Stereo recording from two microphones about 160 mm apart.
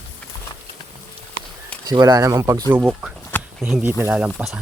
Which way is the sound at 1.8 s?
25° right (ahead or behind).